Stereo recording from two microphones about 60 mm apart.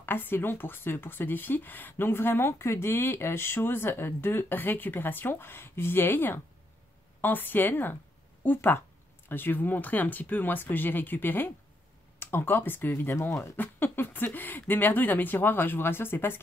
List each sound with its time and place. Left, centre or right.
0.0 s speech: left